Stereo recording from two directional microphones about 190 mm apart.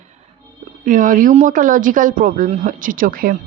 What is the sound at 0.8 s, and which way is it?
A woman's voice, 40° right (ahead or behind).